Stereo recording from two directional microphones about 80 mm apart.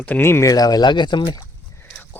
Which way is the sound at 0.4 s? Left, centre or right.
Left.